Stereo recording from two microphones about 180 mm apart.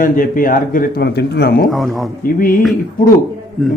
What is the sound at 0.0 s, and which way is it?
A man's voice, 50° left (ahead or behind).